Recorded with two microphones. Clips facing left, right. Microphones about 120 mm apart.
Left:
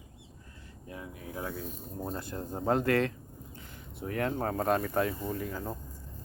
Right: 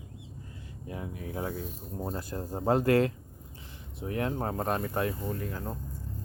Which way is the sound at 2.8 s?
35° right (ahead or behind).